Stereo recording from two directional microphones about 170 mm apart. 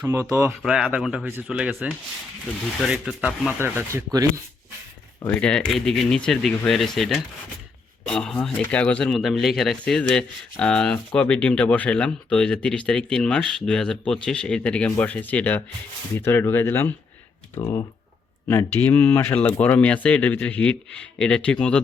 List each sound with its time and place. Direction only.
0.0 s speech: 15° right (ahead or behind)
0.6 s speech: 5° right (ahead or behind)
3.6 s speech: 15° right (ahead or behind)
5.2 s speech: 5° left (ahead or behind)